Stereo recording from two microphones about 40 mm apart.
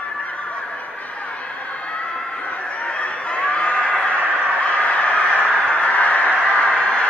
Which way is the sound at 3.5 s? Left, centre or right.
Left.